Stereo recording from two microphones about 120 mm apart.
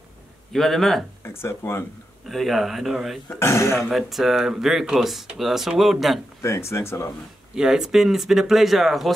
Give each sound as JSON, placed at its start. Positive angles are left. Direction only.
{"t": 0.5, "sound": "speech", "side_deg": 0}
{"t": 1.4, "sound": "speech", "side_deg": 20}
{"t": 2.2, "sound": "speech", "side_deg": 0}
{"t": 3.3, "sound": "speech", "side_deg": 20}
{"t": 3.7, "sound": "speech", "side_deg": 0}
{"t": 6.4, "sound": "speech", "side_deg": 25}
{"t": 7.5, "sound": "speech", "side_deg": -5}